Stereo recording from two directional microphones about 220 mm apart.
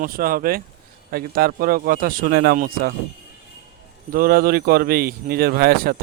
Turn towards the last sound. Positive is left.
turn(degrees=-45)  # may be behind; listen again after turning